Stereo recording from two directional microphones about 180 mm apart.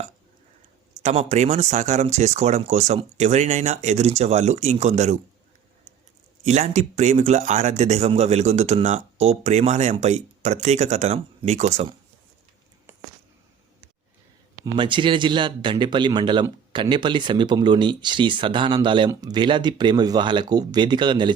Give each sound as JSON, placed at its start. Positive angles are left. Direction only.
{"t": 1.0, "sound": "speech", "side_deg": -40}
{"t": 6.4, "sound": "speech", "side_deg": -40}
{"t": 14.6, "sound": "speech", "side_deg": -25}